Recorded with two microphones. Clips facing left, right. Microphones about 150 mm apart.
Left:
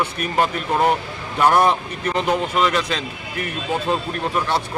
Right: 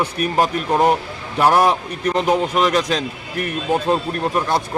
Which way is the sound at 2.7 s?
40° right (ahead or behind).